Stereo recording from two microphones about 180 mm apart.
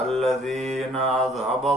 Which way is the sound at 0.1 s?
Centre (ahead or behind).